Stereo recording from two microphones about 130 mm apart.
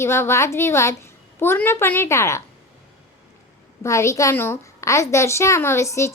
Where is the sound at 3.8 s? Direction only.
20° left (ahead or behind).